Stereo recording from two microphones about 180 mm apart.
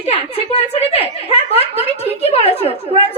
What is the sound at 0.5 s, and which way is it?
A woman's voice, 35° left (ahead or behind).